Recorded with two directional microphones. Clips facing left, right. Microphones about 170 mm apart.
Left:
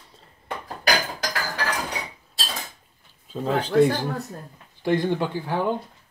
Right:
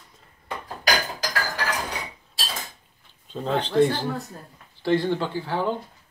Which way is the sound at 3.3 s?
5° left (ahead or behind).